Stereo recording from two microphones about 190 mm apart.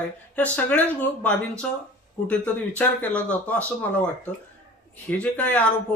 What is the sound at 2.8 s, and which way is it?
Speech, 5° left (ahead or behind).